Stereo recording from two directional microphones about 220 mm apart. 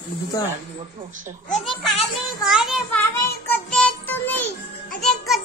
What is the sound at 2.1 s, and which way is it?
Speech, centre (ahead or behind).